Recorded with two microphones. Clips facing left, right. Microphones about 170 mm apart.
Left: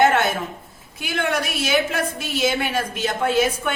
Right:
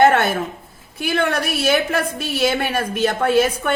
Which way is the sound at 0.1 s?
60° right (ahead or behind).